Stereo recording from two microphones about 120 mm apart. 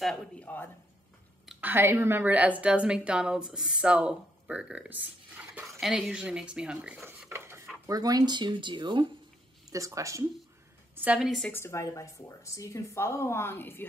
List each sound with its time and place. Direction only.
0.0 s a woman's voice: 5° left (ahead or behind)
1.6 s a woman's voice: 15° right (ahead or behind)
7.2 s dishes: 20° right (ahead or behind)
7.8 s speech: 30° right (ahead or behind)
9.7 s speech: 25° right (ahead or behind)
11.0 s a woman's voice: 10° right (ahead or behind)
11.2 s a woman's voice: 5° left (ahead or behind)
11.5 s speech: 25° left (ahead or behind)